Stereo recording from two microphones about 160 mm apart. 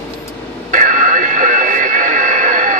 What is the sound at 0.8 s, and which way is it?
Radio, 55° right (ahead or behind).